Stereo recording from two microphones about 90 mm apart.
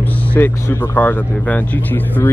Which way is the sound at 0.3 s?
20° left (ahead or behind).